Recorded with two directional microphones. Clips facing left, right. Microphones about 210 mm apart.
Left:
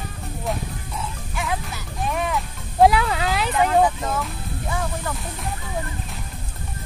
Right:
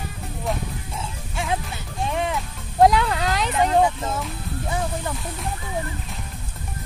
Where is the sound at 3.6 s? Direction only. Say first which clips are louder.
Even; 25° right (ahead or behind).